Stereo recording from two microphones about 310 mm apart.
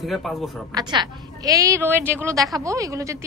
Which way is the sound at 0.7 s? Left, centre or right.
Centre.